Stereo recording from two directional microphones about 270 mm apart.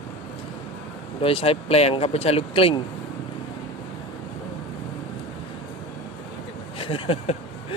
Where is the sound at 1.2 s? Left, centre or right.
Centre.